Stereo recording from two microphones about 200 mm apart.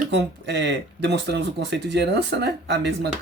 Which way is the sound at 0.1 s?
60° right (ahead or behind).